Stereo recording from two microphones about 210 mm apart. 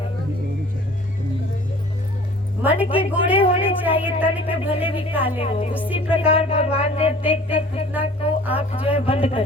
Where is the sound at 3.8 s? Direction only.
10° right (ahead or behind).